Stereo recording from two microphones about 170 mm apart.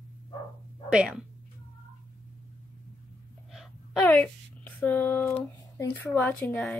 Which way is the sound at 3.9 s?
10° left (ahead or behind).